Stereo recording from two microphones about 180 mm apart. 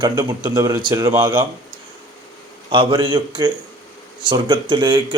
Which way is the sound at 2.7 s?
30° right (ahead or behind).